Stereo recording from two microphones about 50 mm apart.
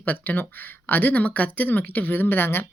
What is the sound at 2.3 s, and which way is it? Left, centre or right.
Speech, left.